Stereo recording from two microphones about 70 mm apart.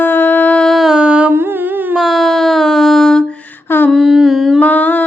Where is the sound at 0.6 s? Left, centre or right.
Centre.